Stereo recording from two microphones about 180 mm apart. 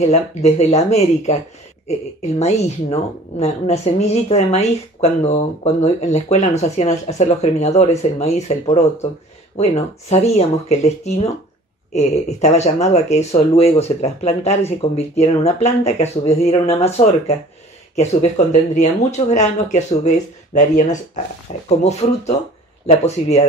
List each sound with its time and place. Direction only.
0.0 s a woman's voice: 35° left (ahead or behind)
17.9 s a woman's voice: 40° left (ahead or behind)